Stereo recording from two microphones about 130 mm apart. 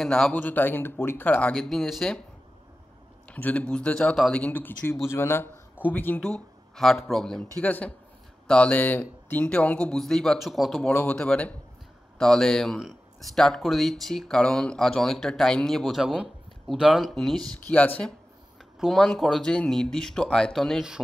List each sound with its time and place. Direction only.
0.0 s speech: 5° left (ahead or behind)
3.3 s speech: 10° left (ahead or behind)
17.6 s speech: 15° left (ahead or behind)
18.8 s speech: centre (ahead or behind)